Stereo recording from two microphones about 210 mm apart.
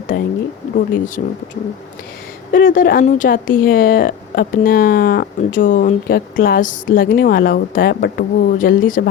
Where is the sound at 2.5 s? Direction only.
40° left (ahead or behind).